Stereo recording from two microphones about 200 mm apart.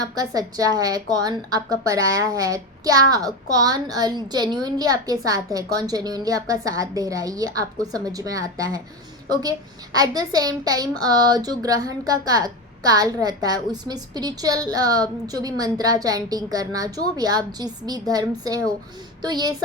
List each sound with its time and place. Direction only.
0.0 s a woman's voice: 20° right (ahead or behind)